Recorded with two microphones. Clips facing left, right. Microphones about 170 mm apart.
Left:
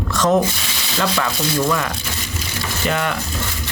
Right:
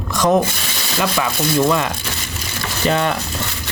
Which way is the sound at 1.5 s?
25° right (ahead or behind).